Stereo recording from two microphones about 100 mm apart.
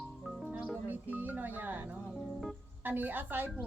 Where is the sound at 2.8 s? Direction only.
20° right (ahead or behind).